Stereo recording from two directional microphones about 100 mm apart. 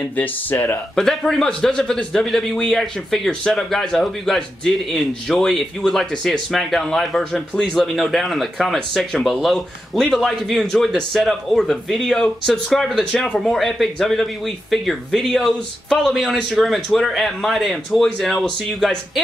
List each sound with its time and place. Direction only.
0.1 s speech: 20° left (ahead or behind)
0.9 s speech: 5° left (ahead or behind)